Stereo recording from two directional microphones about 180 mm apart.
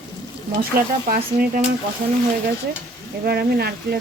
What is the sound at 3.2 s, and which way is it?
Speech, 60° right (ahead or behind).